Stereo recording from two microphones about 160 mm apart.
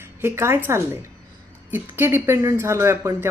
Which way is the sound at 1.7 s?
15° right (ahead or behind).